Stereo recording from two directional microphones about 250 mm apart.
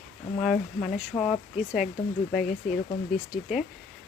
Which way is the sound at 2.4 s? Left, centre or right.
Left.